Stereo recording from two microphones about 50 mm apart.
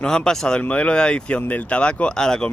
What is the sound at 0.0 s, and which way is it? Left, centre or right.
Speech, centre.